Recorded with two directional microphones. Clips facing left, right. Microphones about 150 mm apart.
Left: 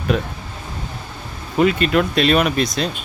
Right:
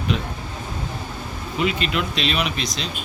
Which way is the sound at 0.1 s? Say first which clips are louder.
Left 5 dB; 50° left (ahead or behind).